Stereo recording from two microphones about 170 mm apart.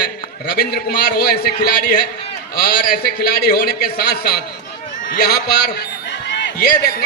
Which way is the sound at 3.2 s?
65° left (ahead or behind).